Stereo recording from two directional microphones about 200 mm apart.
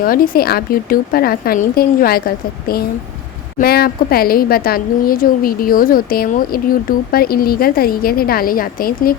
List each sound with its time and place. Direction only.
0.0 s a woman's voice: 45° left (ahead or behind)